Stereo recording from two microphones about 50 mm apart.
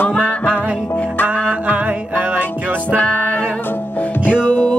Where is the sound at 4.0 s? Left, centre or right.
Left.